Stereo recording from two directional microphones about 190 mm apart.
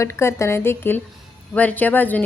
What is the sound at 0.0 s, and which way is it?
A woman's voice, 15° left (ahead or behind).